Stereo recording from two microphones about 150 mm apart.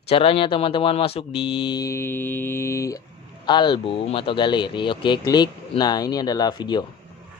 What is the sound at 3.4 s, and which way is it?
Speech, 30° left (ahead or behind).